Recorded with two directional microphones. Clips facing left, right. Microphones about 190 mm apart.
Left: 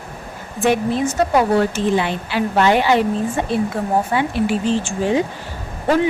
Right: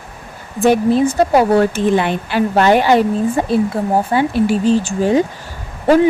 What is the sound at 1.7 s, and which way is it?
A woman's voice, 55° right (ahead or behind).